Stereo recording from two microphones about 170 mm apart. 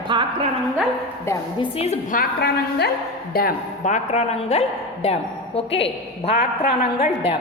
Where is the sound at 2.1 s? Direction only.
70° left (ahead or behind).